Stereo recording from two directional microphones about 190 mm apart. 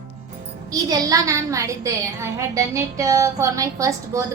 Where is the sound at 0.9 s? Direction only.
15° right (ahead or behind).